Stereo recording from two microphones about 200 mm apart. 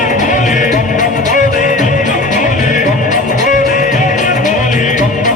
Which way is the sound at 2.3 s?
40° left (ahead or behind).